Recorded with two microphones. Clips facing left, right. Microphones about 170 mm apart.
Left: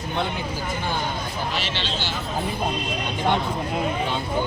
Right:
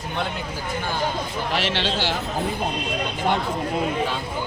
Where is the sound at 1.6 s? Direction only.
75° right (ahead or behind).